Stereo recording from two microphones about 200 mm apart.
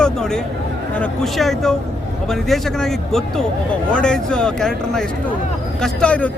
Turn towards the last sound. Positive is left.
turn(degrees=5)  # may be behind; listen again after turning